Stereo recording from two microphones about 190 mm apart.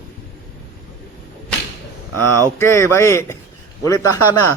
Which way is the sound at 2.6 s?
15° left (ahead or behind).